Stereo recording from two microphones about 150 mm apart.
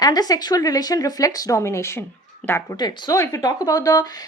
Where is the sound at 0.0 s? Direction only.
25° left (ahead or behind).